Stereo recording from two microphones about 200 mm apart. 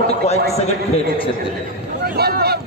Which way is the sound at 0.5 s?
30° left (ahead or behind).